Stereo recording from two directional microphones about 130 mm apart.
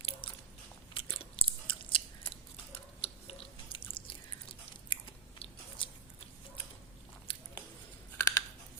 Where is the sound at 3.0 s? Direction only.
50° left (ahead or behind).